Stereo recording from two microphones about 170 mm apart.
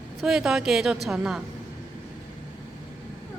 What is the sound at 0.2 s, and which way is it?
Speech, 5° right (ahead or behind).